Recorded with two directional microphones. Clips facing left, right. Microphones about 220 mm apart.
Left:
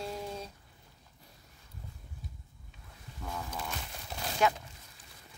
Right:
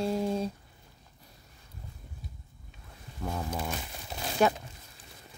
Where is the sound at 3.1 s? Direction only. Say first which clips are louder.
Right 6 dB; 35° right (ahead or behind).